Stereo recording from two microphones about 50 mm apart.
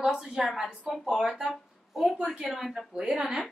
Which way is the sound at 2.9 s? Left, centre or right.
Centre.